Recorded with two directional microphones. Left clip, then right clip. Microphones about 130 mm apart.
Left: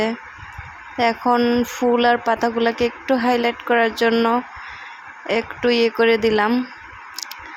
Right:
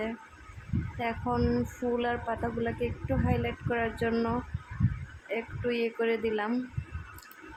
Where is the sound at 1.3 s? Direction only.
25° left (ahead or behind).